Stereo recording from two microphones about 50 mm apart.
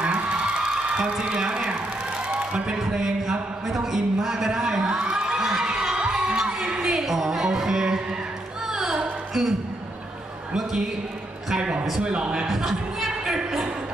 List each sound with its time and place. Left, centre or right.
0.0 s a sound: right
2.8 s speech: centre
8.6 s music: centre
11.4 s a man's voice: centre
12.4 s speech: centre